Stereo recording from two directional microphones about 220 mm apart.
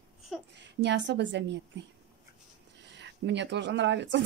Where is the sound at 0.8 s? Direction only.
50° right (ahead or behind).